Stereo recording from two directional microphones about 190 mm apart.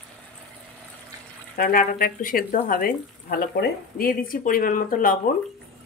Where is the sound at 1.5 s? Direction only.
50° left (ahead or behind).